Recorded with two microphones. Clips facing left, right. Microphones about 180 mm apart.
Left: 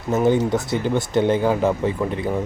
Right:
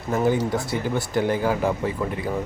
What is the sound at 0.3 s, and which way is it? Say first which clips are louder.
Speech: left 4 dB; 20° left (ahead or behind).